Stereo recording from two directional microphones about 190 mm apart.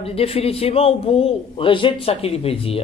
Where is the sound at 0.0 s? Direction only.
30° left (ahead or behind).